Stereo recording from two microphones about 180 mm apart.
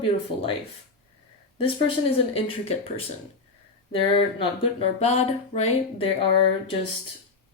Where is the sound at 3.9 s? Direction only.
30° left (ahead or behind).